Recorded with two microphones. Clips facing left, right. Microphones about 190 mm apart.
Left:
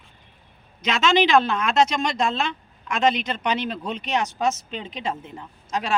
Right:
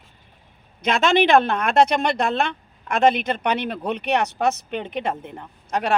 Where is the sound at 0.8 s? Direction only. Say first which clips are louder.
Right 2 dB; 55° right (ahead or behind).